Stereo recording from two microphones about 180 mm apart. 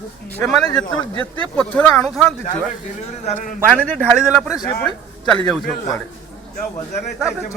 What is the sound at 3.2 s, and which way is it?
Speech, 35° left (ahead or behind).